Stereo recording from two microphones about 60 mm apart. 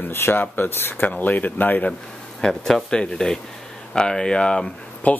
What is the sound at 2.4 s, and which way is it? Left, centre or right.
A man's voice, centre.